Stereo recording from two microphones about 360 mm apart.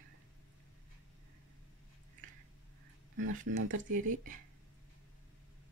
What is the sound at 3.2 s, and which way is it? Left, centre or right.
Speech, right.